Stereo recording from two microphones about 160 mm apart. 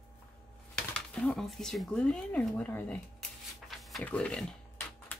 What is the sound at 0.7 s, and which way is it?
Speech, 5° left (ahead or behind).